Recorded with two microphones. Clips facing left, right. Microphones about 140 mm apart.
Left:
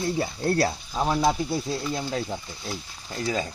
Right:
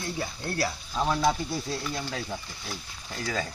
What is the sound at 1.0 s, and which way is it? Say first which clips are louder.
Speech: left 2 dB; 15° left (ahead or behind).